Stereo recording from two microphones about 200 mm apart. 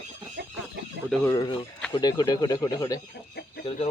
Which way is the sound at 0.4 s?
60° right (ahead or behind).